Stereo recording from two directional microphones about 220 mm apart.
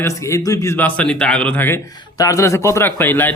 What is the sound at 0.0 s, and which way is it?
A man's voice, 15° left (ahead or behind).